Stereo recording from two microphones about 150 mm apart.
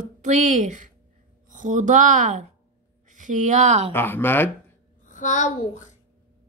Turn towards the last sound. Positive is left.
turn(degrees=55)  # may be behind; listen again after turning